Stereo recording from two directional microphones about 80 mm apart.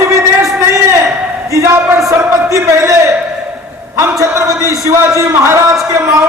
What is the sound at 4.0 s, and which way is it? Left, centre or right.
A man's voice, right.